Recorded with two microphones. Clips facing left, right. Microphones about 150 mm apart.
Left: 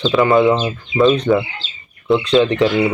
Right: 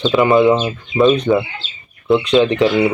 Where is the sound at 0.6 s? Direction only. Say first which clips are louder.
Right 1 dB; centre (ahead or behind).